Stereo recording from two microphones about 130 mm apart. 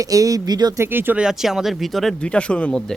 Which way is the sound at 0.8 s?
15° right (ahead or behind).